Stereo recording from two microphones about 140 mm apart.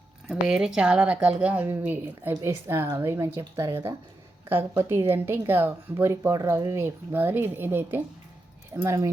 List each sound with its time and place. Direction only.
0.3 s speech: 5° right (ahead or behind); by 9.0 s 20° right (ahead or behind)